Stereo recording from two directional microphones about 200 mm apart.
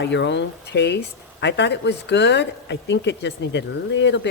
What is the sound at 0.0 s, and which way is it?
Speech, 65° left (ahead or behind).